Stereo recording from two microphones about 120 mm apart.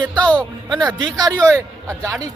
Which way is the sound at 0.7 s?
30° right (ahead or behind).